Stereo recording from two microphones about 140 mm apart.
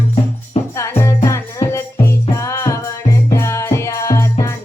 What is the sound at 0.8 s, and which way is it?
Music, 20° left (ahead or behind).